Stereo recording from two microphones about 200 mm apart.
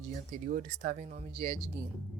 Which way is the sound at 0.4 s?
45° right (ahead or behind).